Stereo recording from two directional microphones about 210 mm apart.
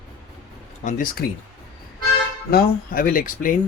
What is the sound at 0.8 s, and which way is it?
Speech, 40° left (ahead or behind).